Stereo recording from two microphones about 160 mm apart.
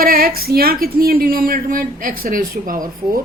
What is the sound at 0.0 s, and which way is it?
A woman's voice, 65° right (ahead or behind).